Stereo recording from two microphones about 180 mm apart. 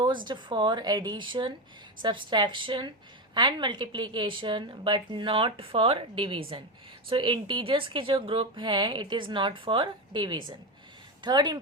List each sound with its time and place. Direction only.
0.3 s a woman's voice: 25° right (ahead or behind)